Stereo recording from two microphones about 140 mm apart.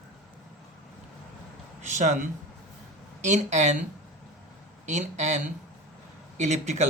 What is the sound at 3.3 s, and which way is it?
Speech, 60° right (ahead or behind).